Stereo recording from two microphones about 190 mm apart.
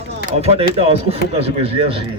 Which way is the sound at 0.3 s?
35° right (ahead or behind).